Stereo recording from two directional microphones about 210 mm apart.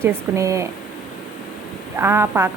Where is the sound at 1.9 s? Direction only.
10° right (ahead or behind).